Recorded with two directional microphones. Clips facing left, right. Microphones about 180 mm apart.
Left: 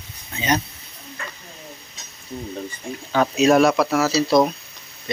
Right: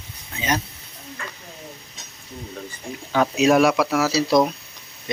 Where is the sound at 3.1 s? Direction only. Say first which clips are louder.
Left 1 dB; 10° right (ahead or behind).